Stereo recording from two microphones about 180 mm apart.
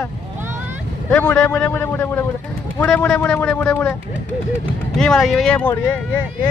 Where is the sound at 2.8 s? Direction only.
5° left (ahead or behind).